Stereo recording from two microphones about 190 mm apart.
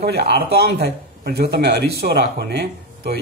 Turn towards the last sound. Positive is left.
turn(degrees=-60)  # may be behind; listen again after turning